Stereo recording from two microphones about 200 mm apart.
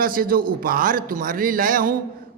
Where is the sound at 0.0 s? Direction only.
45° right (ahead or behind).